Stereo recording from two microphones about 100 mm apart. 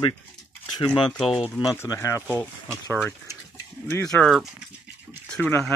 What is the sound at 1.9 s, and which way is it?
Speech, 30° left (ahead or behind).